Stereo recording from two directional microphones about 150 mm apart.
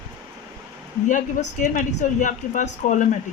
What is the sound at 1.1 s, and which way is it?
Speech, 60° left (ahead or behind).